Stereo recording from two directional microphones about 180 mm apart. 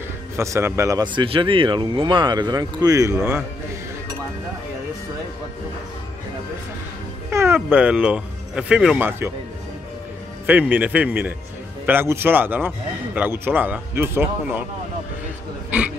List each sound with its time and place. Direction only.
0.4 s speech: 15° right (ahead or behind)
7.2 s speech: 15° right (ahead or behind)
10.4 s a man's voice: 10° right (ahead or behind)
15.7 s a sound: 10° right (ahead or behind)